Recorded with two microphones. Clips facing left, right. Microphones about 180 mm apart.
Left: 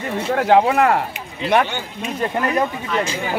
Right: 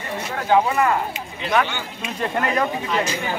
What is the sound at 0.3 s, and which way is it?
Speech, 70° left (ahead or behind).